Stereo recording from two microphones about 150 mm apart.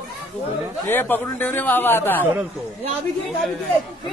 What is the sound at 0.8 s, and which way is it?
A man's voice, 15° left (ahead or behind).